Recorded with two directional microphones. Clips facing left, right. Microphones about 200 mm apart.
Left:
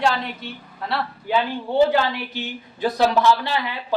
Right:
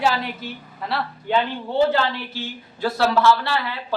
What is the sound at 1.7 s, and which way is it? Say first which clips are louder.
Speech: left 2 dB; 15° left (ahead or behind).